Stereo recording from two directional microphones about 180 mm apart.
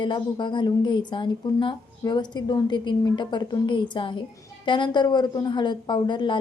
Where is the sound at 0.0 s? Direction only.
25° left (ahead or behind).